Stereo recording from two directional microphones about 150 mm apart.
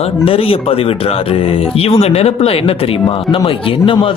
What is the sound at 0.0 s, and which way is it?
Speech, 40° left (ahead or behind).